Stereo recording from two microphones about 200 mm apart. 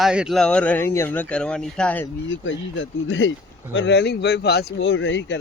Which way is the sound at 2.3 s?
70° left (ahead or behind).